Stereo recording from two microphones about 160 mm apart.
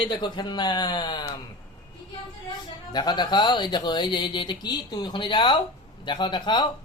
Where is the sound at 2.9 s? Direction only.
25° left (ahead or behind).